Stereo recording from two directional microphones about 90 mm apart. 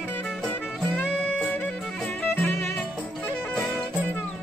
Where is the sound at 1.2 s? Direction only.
20° left (ahead or behind).